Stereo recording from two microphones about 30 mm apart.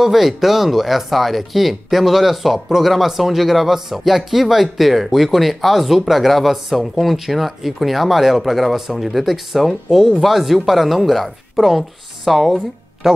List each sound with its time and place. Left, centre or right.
0.0 s speech: centre
13.0 s speech: centre